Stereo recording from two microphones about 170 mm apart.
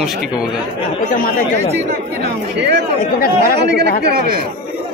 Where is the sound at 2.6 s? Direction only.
85° right.